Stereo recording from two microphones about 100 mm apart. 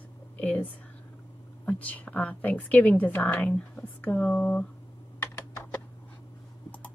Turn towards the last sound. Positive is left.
turn(degrees=25)  # may be behind; listen again after turning